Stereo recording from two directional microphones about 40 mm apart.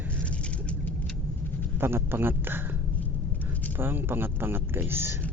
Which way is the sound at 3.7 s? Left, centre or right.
Right.